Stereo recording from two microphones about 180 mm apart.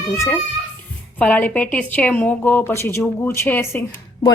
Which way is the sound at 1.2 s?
10° left (ahead or behind).